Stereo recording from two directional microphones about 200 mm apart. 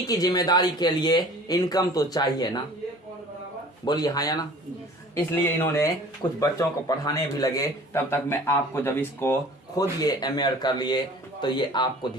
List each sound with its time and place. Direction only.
0.1 s speech: 20° left (ahead or behind)
3.8 s a man's voice: 20° left (ahead or behind)